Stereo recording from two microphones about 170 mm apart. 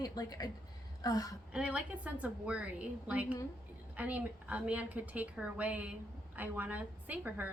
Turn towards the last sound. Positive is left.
turn(degrees=-10)  # may be behind; listen again after turning